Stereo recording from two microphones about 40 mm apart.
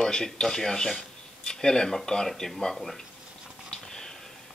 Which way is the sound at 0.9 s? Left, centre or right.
Left.